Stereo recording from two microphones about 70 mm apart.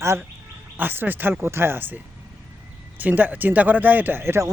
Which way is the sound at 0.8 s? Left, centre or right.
Right.